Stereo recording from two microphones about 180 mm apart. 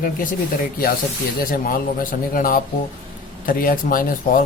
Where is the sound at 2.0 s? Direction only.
50° left (ahead or behind).